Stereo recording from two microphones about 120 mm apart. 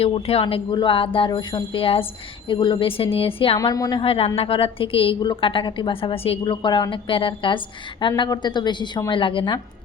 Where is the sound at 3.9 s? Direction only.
55° left (ahead or behind).